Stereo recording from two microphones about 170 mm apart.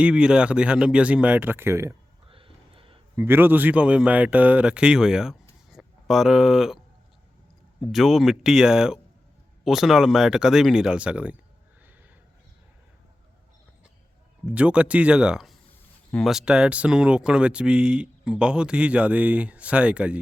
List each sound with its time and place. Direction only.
0.0 s speech: 5° right (ahead or behind)
2.2 s a sound: 30° right (ahead or behind)
3.2 s speech: 15° right (ahead or behind)
7.8 s speech: centre (ahead or behind)
14.4 s speech: 5° right (ahead or behind)